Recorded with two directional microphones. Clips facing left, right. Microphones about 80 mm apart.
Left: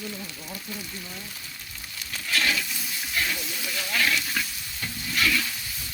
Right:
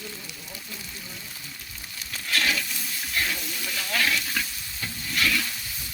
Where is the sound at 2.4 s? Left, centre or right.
Centre.